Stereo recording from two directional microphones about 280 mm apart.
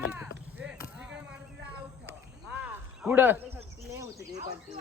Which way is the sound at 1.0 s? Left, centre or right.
Centre.